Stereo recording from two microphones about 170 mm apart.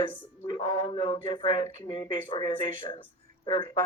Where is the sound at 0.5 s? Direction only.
20° left (ahead or behind).